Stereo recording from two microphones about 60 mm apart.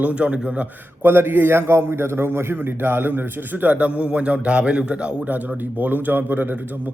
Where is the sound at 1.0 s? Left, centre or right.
Right.